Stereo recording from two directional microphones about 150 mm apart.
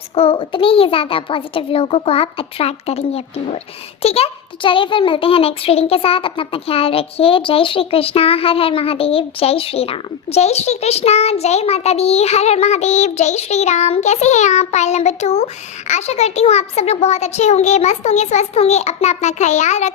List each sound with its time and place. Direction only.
0.1 s a child's voice: 40° left (ahead or behind)